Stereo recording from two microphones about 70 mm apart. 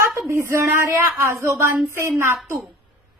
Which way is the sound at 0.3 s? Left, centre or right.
Right.